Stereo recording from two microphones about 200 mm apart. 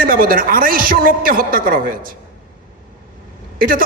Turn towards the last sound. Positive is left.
turn(degrees=-45)  # may be behind; listen again after turning